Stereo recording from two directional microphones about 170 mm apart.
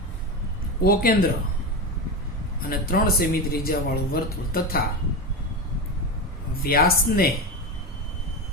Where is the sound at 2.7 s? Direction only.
60° left (ahead or behind).